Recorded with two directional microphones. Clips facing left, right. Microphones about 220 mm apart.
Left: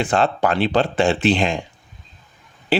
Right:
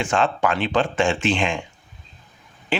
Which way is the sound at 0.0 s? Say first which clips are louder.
Left 2 dB; 35° left (ahead or behind).